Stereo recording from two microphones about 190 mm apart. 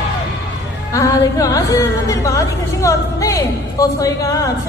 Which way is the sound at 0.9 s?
15° left (ahead or behind).